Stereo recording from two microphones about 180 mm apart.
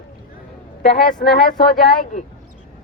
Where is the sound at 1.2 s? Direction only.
60° left (ahead or behind).